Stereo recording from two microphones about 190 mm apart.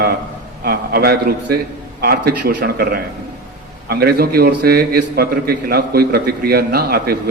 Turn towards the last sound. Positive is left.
turn(degrees=-55)  # may be behind; listen again after turning